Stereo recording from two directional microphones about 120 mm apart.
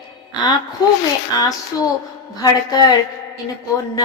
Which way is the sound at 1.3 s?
35° left (ahead or behind).